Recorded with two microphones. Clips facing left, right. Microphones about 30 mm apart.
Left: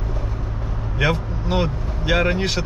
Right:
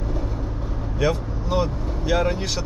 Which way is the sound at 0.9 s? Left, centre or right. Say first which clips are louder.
Left 2 dB; left.